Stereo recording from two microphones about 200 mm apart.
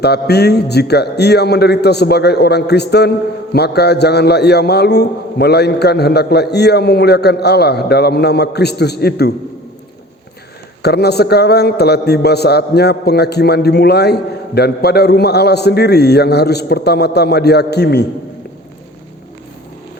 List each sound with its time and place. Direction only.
0.0 s a man's voice: 55° left (ahead or behind)
10.8 s a man's voice: 55° left (ahead or behind)